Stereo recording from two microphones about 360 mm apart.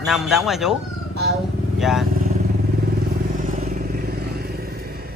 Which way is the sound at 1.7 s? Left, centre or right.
Centre.